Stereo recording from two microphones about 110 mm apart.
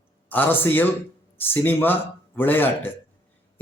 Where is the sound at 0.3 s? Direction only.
15° left (ahead or behind).